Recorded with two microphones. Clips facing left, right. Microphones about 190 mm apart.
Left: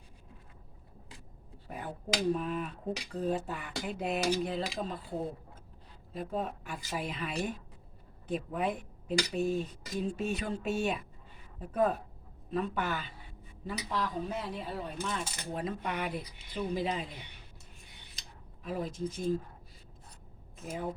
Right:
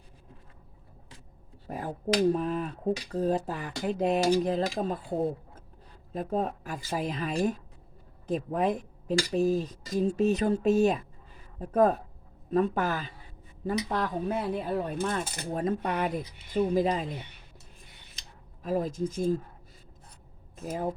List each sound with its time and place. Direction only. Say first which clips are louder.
2.3 s speech: right 4 dB; 40° right (ahead or behind)
6.1 s speech: right 6 dB; 40° right (ahead or behind)
13.7 s speech: right 6 dB; 50° right (ahead or behind)
18.6 s speech: right 6 dB; 45° right (ahead or behind)